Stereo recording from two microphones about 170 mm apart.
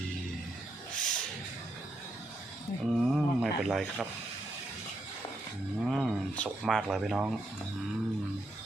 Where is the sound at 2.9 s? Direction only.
Centre (ahead or behind).